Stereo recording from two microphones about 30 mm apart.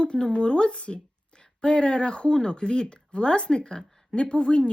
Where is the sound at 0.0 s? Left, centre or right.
Left.